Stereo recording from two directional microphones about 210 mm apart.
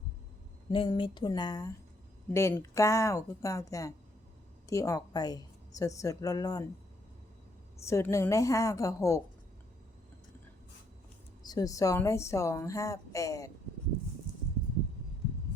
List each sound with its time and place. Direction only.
0.7 s a sound: 25° left (ahead or behind)
2.3 s a woman's voice: 15° left (ahead or behind)
7.9 s a woman's voice: 15° left (ahead or behind)
11.4 s a woman's voice: 15° left (ahead or behind)